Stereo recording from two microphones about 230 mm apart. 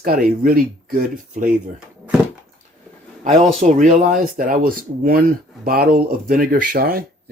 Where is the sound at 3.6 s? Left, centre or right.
Right.